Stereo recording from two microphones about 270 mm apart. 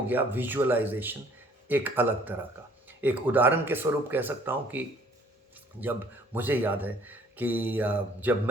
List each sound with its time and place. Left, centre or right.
0.1 s a man's voice: centre